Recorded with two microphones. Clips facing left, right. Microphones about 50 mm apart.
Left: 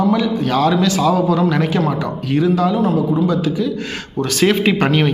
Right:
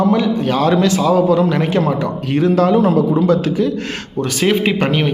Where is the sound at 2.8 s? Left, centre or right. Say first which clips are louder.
Right 4 dB; right.